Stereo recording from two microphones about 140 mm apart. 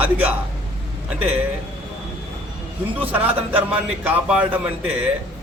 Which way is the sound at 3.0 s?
10° right (ahead or behind).